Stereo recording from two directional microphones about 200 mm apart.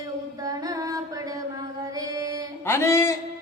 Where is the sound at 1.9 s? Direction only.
15° right (ahead or behind).